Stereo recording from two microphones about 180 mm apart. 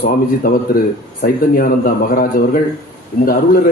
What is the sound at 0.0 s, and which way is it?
Speech, 55° left (ahead or behind).